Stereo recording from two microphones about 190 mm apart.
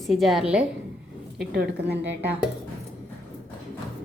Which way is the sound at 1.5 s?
55° right (ahead or behind).